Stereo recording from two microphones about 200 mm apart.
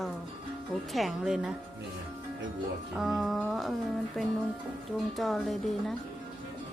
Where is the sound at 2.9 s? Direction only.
Centre (ahead or behind).